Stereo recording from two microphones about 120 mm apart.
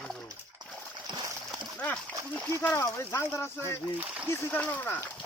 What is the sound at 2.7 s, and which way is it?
Speech, 25° left (ahead or behind).